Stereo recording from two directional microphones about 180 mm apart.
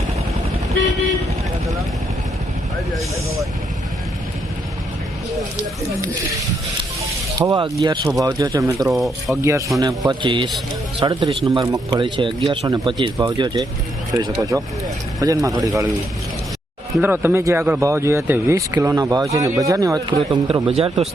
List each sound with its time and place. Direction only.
7.3 s speech: 25° right (ahead or behind)
8.9 s speech: centre (ahead or behind)
9.4 s speech: 15° right (ahead or behind)
17.0 s speech: 10° right (ahead or behind)
20.7 s speech: 35° right (ahead or behind)